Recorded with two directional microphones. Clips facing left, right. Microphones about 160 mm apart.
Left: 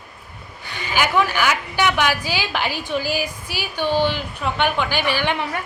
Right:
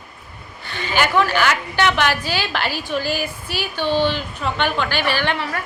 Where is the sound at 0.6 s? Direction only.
10° left (ahead or behind).